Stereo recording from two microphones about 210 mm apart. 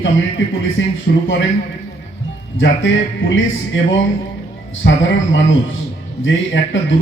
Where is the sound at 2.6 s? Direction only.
65° left (ahead or behind).